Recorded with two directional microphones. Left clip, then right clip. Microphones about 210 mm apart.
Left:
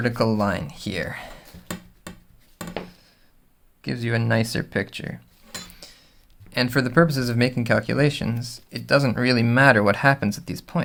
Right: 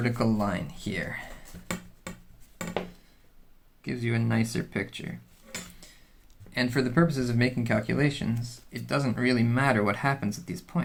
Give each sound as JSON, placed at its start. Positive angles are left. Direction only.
{"t": 0.0, "sound": "speech", "side_deg": 40}
{"t": 3.8, "sound": "speech", "side_deg": 50}
{"t": 6.5, "sound": "speech", "side_deg": 45}